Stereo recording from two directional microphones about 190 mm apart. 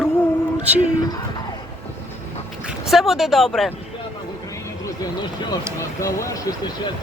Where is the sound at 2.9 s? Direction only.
Centre (ahead or behind).